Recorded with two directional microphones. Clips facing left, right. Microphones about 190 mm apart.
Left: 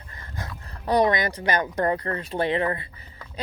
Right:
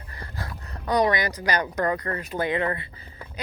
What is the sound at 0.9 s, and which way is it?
Speech, 25° left (ahead or behind).